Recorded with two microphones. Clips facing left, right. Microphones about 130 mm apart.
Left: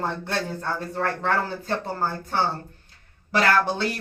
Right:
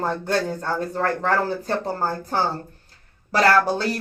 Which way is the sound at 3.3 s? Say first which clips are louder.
Right 3 dB; 40° right (ahead or behind).